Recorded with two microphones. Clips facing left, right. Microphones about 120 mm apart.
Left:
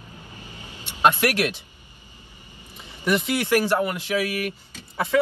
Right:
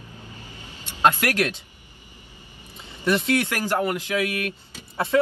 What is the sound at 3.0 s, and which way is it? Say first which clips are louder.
Speech: right 1 dB; 20° left (ahead or behind).